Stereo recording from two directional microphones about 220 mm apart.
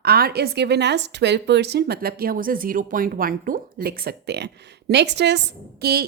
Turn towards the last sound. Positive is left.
turn(degrees=-45)  # may be behind; listen again after turning